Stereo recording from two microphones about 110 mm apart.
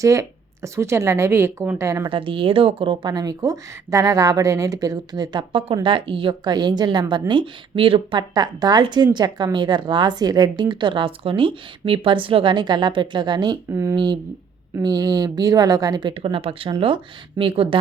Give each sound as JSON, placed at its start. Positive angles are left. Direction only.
{"t": 0.0, "sound": "a woman's voice", "side_deg": -30}
{"t": 2.0, "sound": "a woman's voice", "side_deg": -50}
{"t": 8.3, "sound": "a woman's voice", "side_deg": -35}
{"t": 13.7, "sound": "a woman's voice", "side_deg": -25}
{"t": 13.9, "sound": "a woman's voice", "side_deg": -40}